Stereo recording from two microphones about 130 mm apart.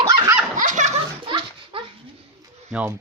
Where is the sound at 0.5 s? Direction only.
80° right.